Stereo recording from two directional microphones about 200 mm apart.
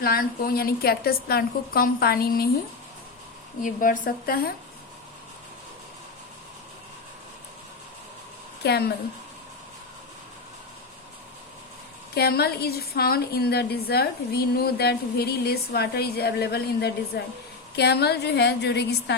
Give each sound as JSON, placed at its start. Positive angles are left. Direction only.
{"t": 0.0, "sound": "a woman's voice", "side_deg": 45}
{"t": 3.6, "sound": "a woman's voice", "side_deg": 40}
{"t": 8.6, "sound": "a woman's voice", "side_deg": 55}
{"t": 12.1, "sound": "a woman's voice", "side_deg": 50}